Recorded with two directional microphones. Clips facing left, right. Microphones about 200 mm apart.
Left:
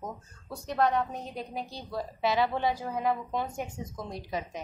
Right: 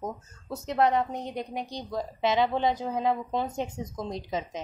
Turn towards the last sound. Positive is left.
turn(degrees=-20)  # may be behind; listen again after turning